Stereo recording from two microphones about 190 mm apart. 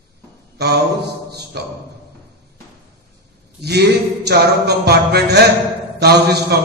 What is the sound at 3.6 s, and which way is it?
Speech, 60° right (ahead or behind).